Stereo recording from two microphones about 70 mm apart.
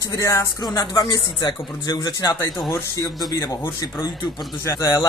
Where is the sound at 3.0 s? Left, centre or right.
Left.